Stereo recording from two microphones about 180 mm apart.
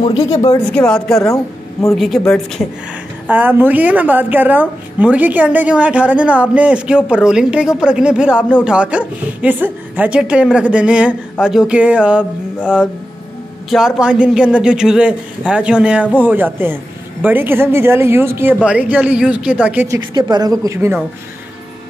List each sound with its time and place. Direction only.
0.7 s a man's voice: 5° left (ahead or behind)
1.2 s a woman's voice: 15° left (ahead or behind)
2.0 s a man's voice: centre (ahead or behind)
3.3 s a woman's voice: 10° right (ahead or behind)
13.7 s a man's voice: 5° right (ahead or behind)
20.2 s speech: 25° right (ahead or behind)